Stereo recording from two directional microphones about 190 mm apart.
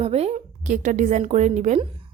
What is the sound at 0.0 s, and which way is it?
Speech, 35° right (ahead or behind).